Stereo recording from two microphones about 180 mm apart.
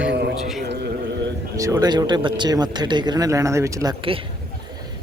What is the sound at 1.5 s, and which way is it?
Speech, 20° right (ahead or behind).